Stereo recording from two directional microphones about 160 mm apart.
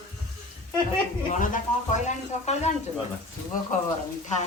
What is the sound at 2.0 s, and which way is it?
Speech, 45° left (ahead or behind).